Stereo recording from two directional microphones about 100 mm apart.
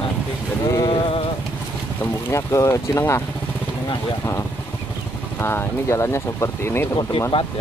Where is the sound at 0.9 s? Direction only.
65° left (ahead or behind).